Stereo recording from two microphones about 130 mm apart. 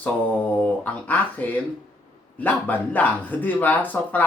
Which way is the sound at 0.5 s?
10° left (ahead or behind).